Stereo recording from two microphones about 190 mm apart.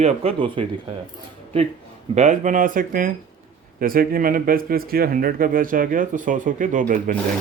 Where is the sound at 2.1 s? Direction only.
40° right (ahead or behind).